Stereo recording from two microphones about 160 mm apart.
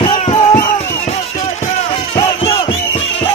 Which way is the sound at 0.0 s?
35° left (ahead or behind).